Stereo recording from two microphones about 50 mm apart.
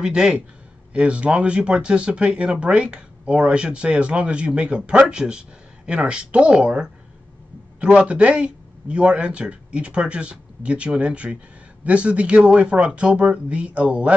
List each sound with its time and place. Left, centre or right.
0.0 s a man's voice: centre